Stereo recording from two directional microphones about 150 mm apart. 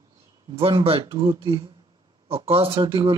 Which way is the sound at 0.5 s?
40° right (ahead or behind).